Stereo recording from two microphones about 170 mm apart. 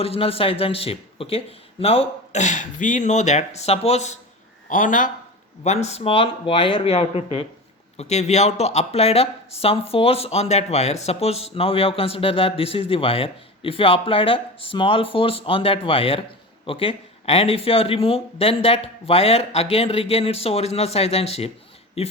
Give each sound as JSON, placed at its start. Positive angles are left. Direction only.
{"t": 0.0, "sound": "speech", "side_deg": 35}
{"t": 4.7, "sound": "speech", "side_deg": 50}
{"t": 5.6, "sound": "speech", "side_deg": 40}